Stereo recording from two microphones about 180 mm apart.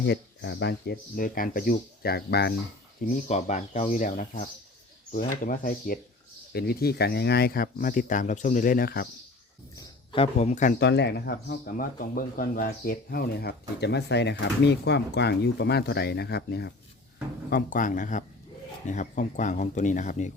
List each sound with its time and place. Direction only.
0.0 s speech: 70° left (ahead or behind)
3.0 s speech: 40° left (ahead or behind)
9.7 s a sound: 25° left (ahead or behind)
10.3 s speech: 40° left (ahead or behind)
10.8 s speech: 70° left (ahead or behind)
17.5 s speech: 45° left (ahead or behind)